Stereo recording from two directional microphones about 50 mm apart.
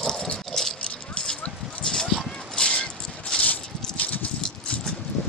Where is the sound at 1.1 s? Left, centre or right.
Centre.